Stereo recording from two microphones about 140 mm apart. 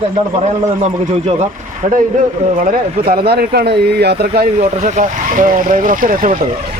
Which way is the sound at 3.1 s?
90° right.